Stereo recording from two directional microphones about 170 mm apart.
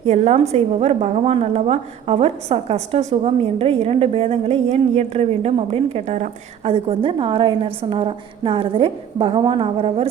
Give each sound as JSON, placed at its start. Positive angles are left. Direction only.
{"t": 0.0, "sound": "a woman's voice", "side_deg": -40}